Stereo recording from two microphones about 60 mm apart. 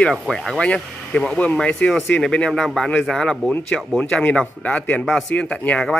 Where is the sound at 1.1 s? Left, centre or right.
Centre.